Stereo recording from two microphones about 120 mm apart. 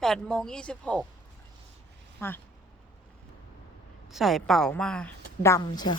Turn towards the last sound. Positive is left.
turn(degrees=35)  # may be behind; listen again after turning